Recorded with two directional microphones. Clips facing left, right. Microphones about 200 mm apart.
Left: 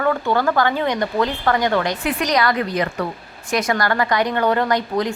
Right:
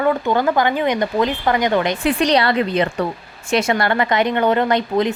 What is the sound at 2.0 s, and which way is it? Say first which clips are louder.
A woman's voice: right 3 dB; 30° right (ahead or behind).